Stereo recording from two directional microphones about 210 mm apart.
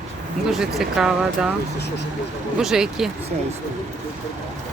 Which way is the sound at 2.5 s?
5° right (ahead or behind).